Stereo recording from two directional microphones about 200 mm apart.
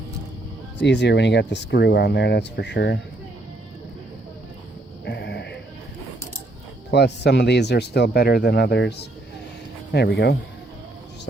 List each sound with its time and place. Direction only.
0.8 s speech: 60° left (ahead or behind)
5.0 s sheep: 60° left (ahead or behind)
6.9 s speech: 55° left (ahead or behind)